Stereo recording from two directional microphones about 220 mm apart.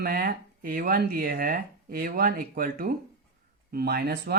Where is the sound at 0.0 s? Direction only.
45° right (ahead or behind).